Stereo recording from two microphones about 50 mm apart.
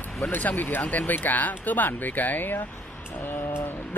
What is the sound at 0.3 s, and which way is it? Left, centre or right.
Speech, left.